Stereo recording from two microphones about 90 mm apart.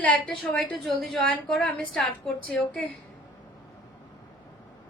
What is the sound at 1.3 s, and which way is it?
A woman's voice, 15° left (ahead or behind).